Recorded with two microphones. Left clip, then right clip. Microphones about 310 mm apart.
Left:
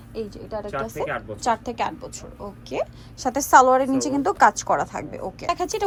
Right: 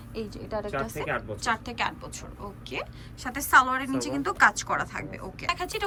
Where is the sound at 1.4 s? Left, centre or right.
Centre.